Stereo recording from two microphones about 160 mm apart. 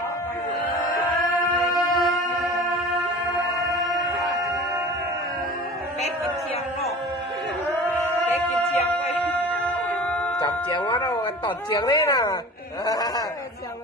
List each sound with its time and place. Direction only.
1.6 s a sound: centre (ahead or behind)
8.3 s music: 45° left (ahead or behind)
10.4 s music: 30° left (ahead or behind)
12.8 s snicker: 25° left (ahead or behind)